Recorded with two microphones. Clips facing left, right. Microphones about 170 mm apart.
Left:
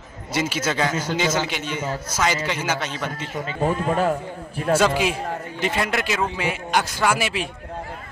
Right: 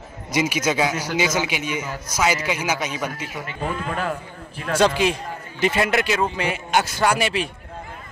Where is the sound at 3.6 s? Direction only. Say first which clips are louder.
Left 6 dB; 35° left (ahead or behind).